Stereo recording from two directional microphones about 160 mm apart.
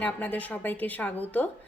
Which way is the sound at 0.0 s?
10° left (ahead or behind).